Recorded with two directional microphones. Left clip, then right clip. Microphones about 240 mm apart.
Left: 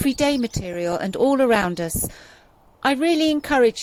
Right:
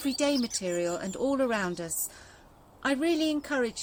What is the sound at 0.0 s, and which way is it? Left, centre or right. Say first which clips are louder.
Speech: left 7 dB; left.